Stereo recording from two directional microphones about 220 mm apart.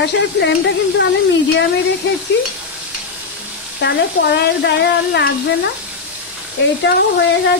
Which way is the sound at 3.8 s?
50° left (ahead or behind).